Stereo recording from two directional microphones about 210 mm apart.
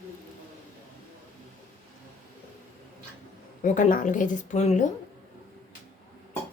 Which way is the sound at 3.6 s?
40° left (ahead or behind).